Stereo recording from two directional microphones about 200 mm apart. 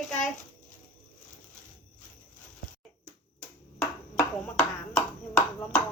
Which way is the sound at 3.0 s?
5° left (ahead or behind).